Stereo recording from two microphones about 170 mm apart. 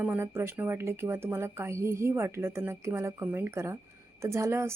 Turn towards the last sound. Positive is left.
turn(degrees=-15)  # may be behind; listen again after turning